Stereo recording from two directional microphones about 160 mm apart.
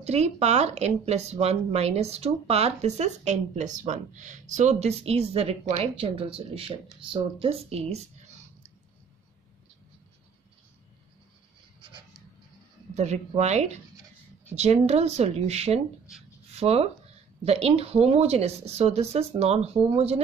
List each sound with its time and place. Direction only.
0.0 s speech: 45° right (ahead or behind)
11.8 s a sound: 30° right (ahead or behind)
12.9 s speech: 45° right (ahead or behind)